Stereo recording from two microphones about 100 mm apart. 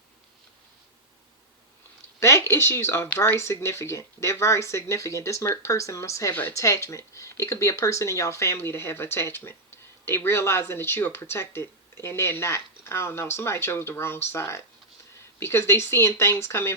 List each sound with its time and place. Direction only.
2.2 s speech: 30° left (ahead or behind)